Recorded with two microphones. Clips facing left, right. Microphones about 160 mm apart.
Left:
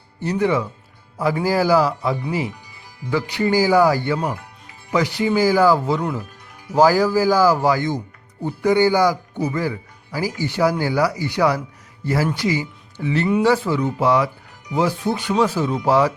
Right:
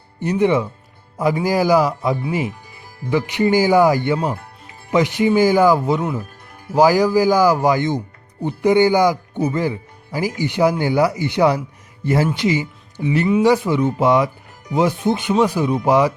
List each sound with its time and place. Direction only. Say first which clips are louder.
0.2 s a man's voice: right 3 dB; 20° right (ahead or behind)
6.0 s a man's voice: right 1 dB; 5° right (ahead or behind)